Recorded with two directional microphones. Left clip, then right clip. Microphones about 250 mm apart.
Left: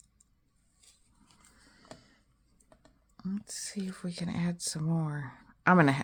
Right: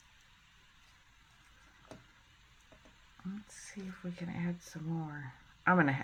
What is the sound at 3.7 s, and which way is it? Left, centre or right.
Speech, left.